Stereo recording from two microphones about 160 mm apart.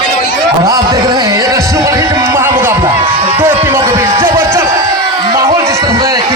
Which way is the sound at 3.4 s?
15° right (ahead or behind).